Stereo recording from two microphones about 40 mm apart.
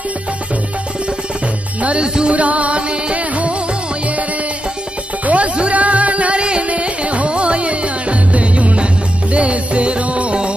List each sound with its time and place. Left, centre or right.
1.8 s music: right
5.2 s music: right